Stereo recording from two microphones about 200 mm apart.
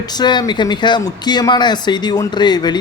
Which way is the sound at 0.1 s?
20° left (ahead or behind).